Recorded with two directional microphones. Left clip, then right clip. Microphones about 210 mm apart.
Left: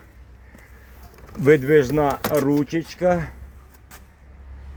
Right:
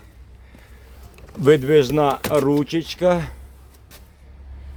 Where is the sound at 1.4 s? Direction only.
5° right (ahead or behind).